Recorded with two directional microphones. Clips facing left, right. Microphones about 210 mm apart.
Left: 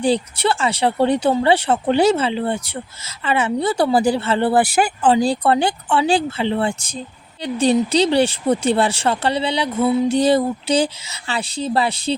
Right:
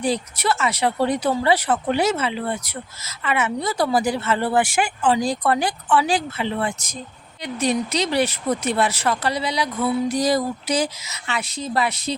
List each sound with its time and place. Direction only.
0.0 s speech: 30° left (ahead or behind)